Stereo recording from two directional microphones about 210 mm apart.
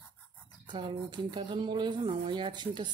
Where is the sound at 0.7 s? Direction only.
25° right (ahead or behind).